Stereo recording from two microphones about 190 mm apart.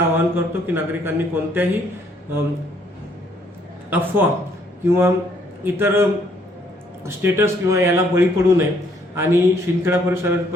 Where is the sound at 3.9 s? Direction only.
10° right (ahead or behind).